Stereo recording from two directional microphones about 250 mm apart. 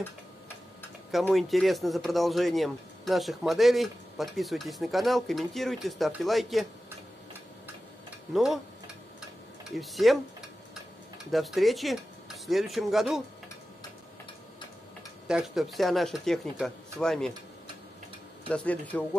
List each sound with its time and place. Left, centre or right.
1.1 s speech: centre
8.3 s speech: centre
9.7 s speech: centre
11.3 s speech: centre
15.2 s speech: centre
18.5 s speech: centre